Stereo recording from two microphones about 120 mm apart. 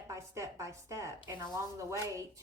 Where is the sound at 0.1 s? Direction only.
25° right (ahead or behind).